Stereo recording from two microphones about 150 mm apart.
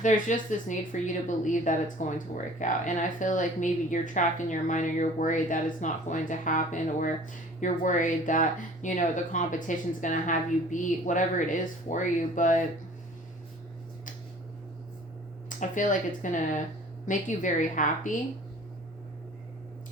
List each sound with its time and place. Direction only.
0.0 s a woman's voice: 55° left (ahead or behind)
15.4 s a woman's voice: 60° left (ahead or behind)